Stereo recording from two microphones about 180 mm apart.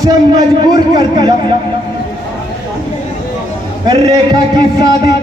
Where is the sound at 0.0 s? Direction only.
25° right (ahead or behind).